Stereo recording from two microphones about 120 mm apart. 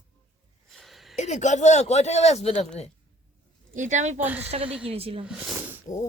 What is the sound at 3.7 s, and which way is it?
Speech, 90° right.